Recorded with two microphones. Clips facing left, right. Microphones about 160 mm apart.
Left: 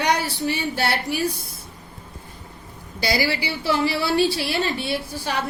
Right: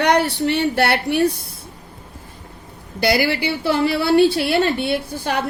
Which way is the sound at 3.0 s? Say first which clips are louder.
Right 5 dB; 60° right (ahead or behind).